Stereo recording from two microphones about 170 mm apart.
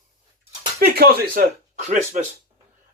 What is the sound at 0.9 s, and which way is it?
Speech, 60° right (ahead or behind).